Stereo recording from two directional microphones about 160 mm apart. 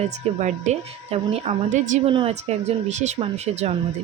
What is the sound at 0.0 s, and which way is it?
Speech, 45° right (ahead or behind).